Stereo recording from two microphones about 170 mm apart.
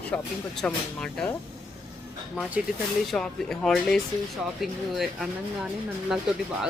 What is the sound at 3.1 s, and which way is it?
Speech, 5° left (ahead or behind).